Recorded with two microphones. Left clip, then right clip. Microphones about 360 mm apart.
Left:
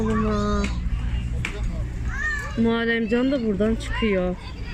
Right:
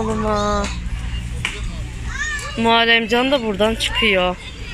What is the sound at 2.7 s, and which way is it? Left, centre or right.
Speech, centre.